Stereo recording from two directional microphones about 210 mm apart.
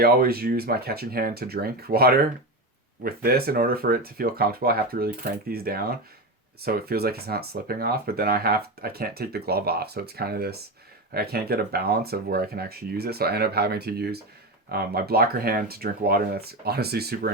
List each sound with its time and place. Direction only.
0.0 s speech: 45° right (ahead or behind)